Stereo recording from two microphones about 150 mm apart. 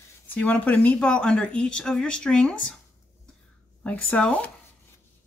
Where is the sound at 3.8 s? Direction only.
10° left (ahead or behind).